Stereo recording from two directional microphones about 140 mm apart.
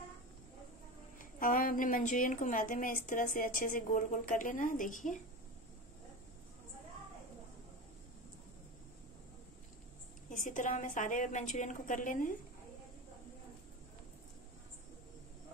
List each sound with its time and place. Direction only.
1.1 s a woman's voice: 80° left
10.3 s a woman's voice: 65° left (ahead or behind)